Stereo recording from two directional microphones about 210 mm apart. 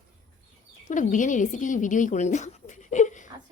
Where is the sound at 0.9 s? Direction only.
35° left (ahead or behind).